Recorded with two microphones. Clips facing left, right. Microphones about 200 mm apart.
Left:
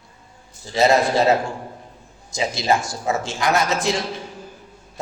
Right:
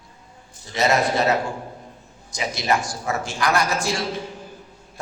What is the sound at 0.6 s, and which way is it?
Speech, 30° left (ahead or behind).